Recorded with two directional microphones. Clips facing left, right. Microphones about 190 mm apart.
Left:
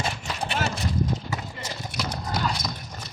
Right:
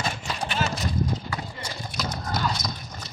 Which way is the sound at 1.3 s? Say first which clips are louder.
Even; 25° left (ahead or behind).